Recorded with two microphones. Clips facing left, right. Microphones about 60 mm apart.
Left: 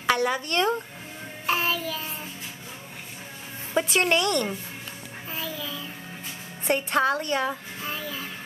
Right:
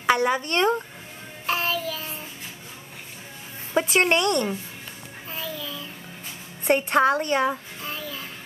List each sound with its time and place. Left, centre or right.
0.0 s a sound: centre
0.4 s a woman's voice: right
1.4 s child singing: centre
3.8 s speech: right
5.3 s music: centre
6.7 s a woman's voice: right
7.8 s music: centre